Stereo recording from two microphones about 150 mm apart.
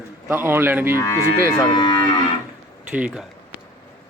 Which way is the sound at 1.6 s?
30° left (ahead or behind).